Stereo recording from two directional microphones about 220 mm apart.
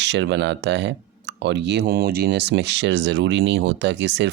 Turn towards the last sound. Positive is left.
turn(degrees=-55)  # may be behind; listen again after turning